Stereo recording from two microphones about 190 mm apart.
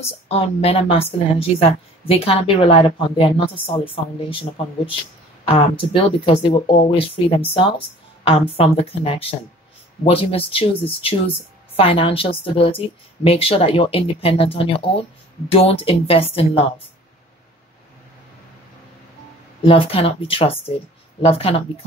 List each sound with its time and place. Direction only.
0.0 s a woman's voice: 30° left (ahead or behind)
19.6 s a woman's voice: 30° left (ahead or behind)